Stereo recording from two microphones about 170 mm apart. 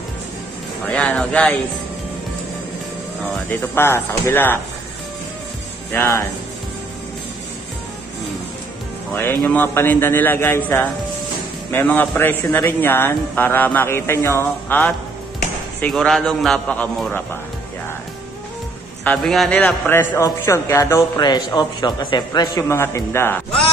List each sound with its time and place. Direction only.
0.8 s a man's voice: 10° left (ahead or behind)
3.4 s a man's voice: 15° left (ahead or behind)
5.9 s a man's voice: 15° left (ahead or behind)
9.1 s a man's voice: 10° left (ahead or behind)
19.0 s a man's voice: centre (ahead or behind)